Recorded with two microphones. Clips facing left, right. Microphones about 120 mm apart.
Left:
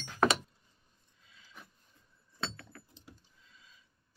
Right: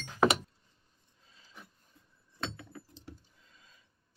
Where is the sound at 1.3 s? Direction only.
35° right (ahead or behind).